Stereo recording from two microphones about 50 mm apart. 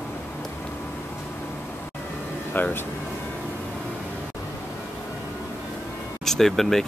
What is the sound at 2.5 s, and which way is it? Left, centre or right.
Speech, left.